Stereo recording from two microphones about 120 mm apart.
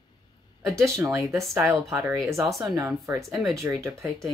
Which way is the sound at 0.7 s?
25° right (ahead or behind).